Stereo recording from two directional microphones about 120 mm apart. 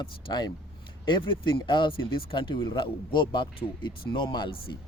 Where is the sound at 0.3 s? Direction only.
40° left (ahead or behind).